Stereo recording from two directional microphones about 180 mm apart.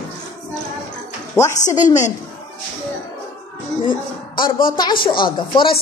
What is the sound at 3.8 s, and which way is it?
Speech, 25° left (ahead or behind).